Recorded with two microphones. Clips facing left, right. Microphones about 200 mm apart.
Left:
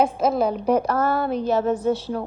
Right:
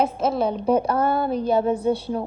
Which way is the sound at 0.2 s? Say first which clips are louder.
Left 2 dB; centre (ahead or behind).